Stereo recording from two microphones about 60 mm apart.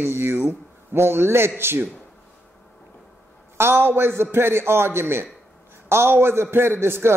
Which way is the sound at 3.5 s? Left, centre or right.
Right.